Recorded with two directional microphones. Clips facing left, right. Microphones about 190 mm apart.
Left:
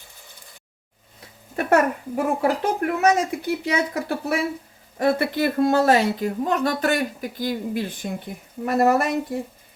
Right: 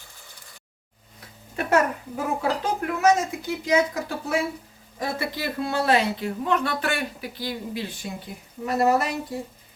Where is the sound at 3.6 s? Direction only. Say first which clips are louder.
Right 5 dB; 60° left (ahead or behind).